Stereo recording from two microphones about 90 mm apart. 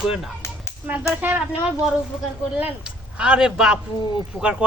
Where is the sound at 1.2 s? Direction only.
20° right (ahead or behind).